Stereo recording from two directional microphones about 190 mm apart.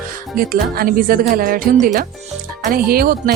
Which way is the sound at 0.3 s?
50° right (ahead or behind).